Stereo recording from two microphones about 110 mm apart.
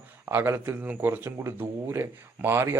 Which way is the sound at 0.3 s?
15° right (ahead or behind).